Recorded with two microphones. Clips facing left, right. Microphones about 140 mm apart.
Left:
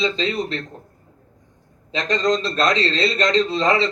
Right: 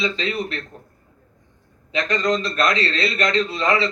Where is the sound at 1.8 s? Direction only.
30° left (ahead or behind).